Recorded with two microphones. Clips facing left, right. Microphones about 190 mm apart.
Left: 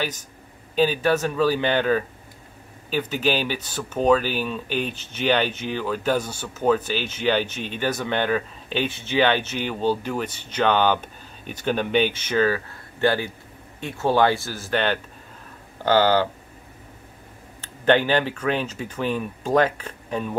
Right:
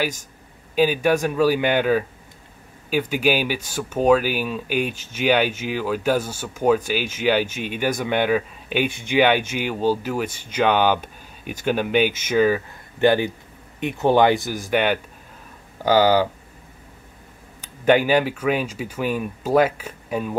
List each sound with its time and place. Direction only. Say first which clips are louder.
0.0 s speech: right 3 dB; 10° right (ahead or behind)
17.6 s speech: right 2 dB; 10° right (ahead or behind)